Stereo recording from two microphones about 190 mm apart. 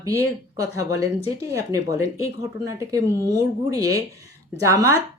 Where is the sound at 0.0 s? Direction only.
15° right (ahead or behind).